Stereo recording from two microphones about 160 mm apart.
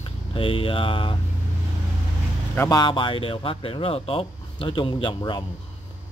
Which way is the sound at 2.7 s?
30° left (ahead or behind).